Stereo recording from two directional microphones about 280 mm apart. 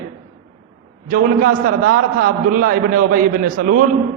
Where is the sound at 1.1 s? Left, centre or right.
Right.